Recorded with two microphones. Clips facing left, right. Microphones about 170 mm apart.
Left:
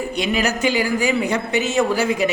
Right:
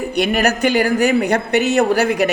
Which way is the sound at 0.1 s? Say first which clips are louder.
Right 6 dB; 60° right (ahead or behind).